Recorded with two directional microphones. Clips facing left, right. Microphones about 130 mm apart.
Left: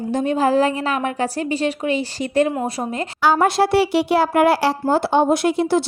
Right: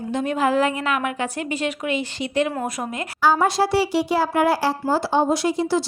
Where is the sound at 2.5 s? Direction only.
30° left (ahead or behind).